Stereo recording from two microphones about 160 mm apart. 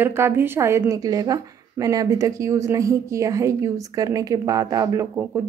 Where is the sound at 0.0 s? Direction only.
15° right (ahead or behind).